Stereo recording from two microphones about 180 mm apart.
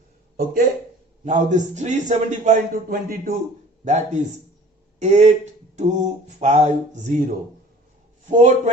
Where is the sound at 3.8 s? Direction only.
40° right (ahead or behind).